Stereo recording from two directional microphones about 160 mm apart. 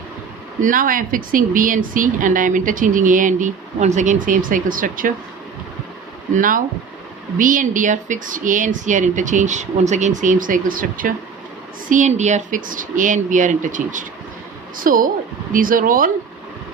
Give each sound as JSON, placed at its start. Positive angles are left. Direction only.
{"t": 0.6, "sound": "speech", "side_deg": -60}
{"t": 6.3, "sound": "speech", "side_deg": -55}